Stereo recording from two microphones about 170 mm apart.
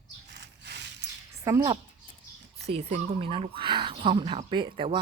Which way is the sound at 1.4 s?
20° right (ahead or behind).